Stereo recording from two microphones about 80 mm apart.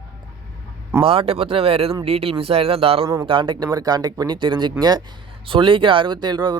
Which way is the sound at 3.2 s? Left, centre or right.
Right.